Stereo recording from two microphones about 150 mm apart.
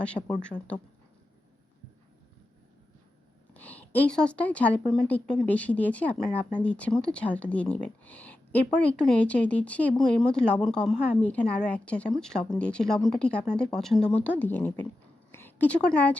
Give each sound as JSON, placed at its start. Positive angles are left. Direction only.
{"t": 0.0, "sound": "a woman's voice", "side_deg": 10}
{"t": 3.5, "sound": "a woman's voice", "side_deg": 10}